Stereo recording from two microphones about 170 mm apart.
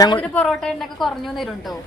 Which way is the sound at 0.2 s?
5° left (ahead or behind).